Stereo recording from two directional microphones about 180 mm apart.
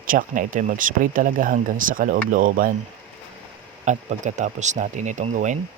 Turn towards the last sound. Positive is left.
turn(degrees=-45)  # may be behind; listen again after turning